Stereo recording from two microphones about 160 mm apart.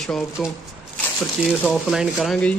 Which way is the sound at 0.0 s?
Centre (ahead or behind).